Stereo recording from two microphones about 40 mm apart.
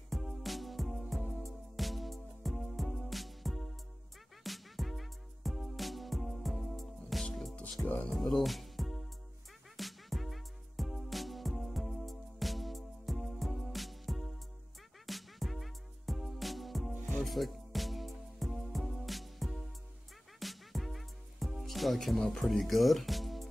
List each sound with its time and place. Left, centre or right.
0.1 s music: centre
7.8 s music: left
8.1 s music: centre
22.2 s speech: centre